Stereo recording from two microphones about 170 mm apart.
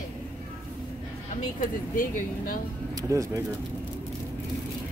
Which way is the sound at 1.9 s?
55° left (ahead or behind).